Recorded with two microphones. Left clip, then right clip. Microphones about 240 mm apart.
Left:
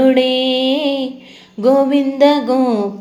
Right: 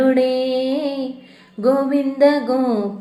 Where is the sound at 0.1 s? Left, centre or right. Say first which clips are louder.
Left 3 dB; left.